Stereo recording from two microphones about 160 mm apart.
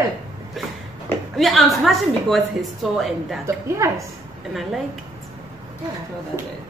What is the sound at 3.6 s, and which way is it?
Speech, 20° right (ahead or behind).